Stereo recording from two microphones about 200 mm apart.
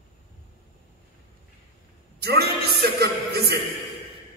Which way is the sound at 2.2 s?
50° right (ahead or behind).